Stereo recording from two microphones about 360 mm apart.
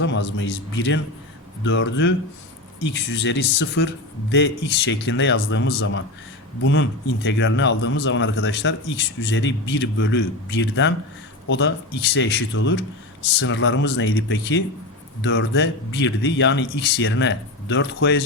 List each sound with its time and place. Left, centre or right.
0.0 s a man's voice: left